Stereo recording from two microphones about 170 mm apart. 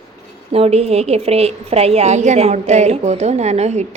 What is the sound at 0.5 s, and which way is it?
A woman's voice, 35° right (ahead or behind).